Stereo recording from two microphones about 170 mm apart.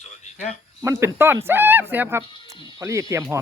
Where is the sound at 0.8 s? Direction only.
15° right (ahead or behind).